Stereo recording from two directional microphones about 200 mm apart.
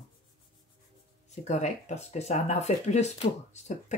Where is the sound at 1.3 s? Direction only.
35° left (ahead or behind).